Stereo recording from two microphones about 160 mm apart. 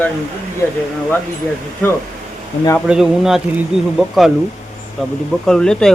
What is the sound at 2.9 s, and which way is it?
Speech, 5° right (ahead or behind).